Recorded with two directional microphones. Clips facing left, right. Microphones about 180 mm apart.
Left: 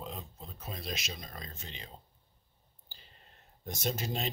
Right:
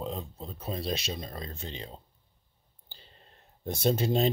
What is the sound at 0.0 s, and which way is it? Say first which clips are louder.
Speech: right 7 dB; 30° right (ahead or behind).